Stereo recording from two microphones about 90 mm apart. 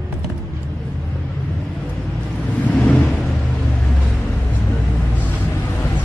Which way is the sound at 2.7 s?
10° left (ahead or behind).